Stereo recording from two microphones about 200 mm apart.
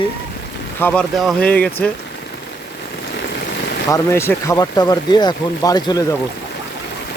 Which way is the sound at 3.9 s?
10° left (ahead or behind).